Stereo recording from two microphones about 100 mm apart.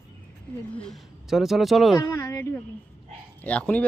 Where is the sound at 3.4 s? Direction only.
15° left (ahead or behind).